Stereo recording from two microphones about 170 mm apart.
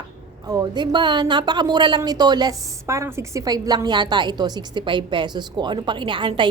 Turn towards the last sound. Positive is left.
turn(degrees=-30)  # may be behind; listen again after turning